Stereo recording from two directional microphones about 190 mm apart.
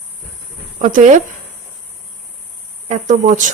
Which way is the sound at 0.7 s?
40° right (ahead or behind).